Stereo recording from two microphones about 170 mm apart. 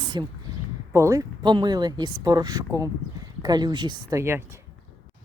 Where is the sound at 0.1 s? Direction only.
25° right (ahead or behind).